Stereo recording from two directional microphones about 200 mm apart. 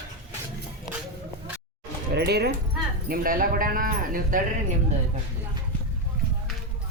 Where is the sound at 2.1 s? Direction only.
55° right (ahead or behind).